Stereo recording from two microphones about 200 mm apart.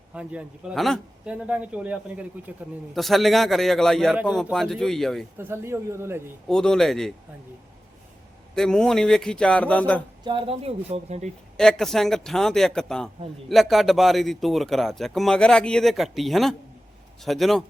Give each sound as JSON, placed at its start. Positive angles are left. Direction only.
{"t": 0.1, "sound": "speech", "side_deg": -5}
{"t": 5.4, "sound": "a man's voice", "side_deg": -10}
{"t": 6.5, "sound": "speech", "side_deg": 5}
{"t": 8.5, "sound": "speech", "side_deg": 5}
{"t": 10.2, "sound": "speech", "side_deg": -25}
{"t": 11.5, "sound": "speech", "side_deg": 0}